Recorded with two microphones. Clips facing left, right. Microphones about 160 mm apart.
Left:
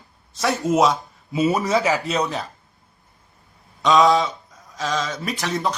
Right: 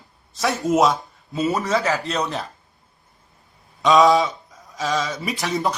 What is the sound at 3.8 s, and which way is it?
Speech, centre (ahead or behind).